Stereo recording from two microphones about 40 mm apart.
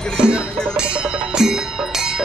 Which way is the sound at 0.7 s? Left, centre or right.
Right.